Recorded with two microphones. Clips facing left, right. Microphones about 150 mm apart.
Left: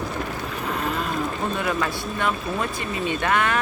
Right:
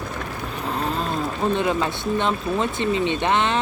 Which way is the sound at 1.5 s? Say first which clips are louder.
Right 3 dB; 25° right (ahead or behind).